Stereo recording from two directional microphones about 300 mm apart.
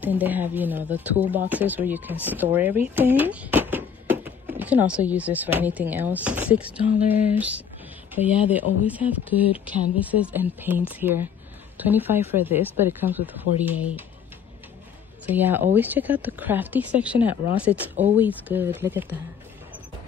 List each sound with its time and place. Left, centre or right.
0.0 s speech: centre
15.2 s speech: centre